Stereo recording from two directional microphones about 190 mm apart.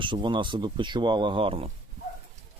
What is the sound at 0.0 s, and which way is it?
Speech, 25° right (ahead or behind).